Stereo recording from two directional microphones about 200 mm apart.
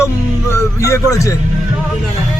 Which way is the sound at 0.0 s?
15° left (ahead or behind).